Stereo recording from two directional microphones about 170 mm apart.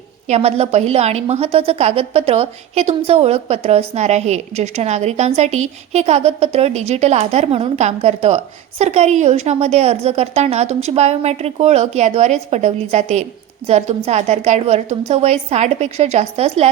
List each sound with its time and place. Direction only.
0.3 s a woman's voice: 35° right (ahead or behind)